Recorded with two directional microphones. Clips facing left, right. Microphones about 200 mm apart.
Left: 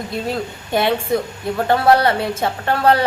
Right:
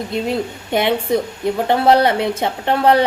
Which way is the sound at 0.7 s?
20° right (ahead or behind).